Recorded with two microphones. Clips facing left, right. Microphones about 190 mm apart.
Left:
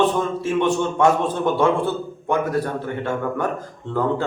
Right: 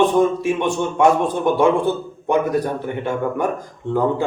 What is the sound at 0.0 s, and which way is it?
A man's voice, 15° right (ahead or behind).